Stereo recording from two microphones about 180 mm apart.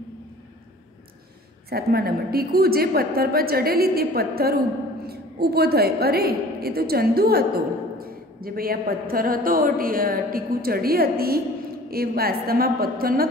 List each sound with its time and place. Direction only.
1.7 s a woman's voice: 60° right (ahead or behind)